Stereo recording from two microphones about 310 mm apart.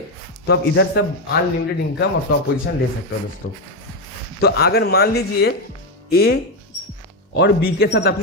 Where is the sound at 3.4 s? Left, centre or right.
Left.